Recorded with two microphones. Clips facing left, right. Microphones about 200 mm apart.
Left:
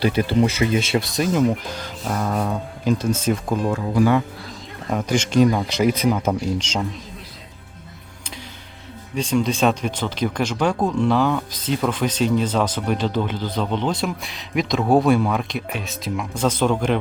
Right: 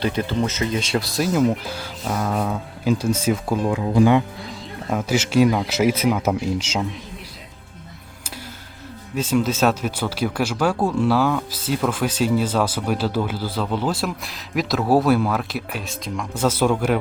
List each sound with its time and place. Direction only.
0.0 s speech: 10° left (ahead or behind)
3.7 s speech: 20° right (ahead or behind)
4.9 s speech: 5° right (ahead or behind)
9.1 s speech: 5° right (ahead or behind)